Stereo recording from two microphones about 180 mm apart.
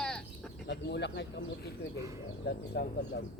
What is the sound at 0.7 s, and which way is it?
Speech, 70° left (ahead or behind).